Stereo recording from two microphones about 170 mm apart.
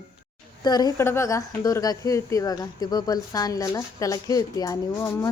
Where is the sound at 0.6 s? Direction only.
25° left (ahead or behind).